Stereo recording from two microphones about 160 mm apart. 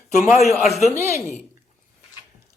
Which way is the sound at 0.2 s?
Centre (ahead or behind).